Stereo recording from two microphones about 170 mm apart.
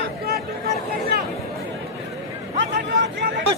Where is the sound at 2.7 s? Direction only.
90° right.